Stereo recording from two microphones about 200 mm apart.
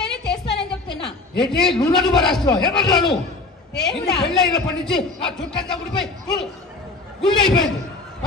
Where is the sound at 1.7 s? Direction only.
20° left (ahead or behind).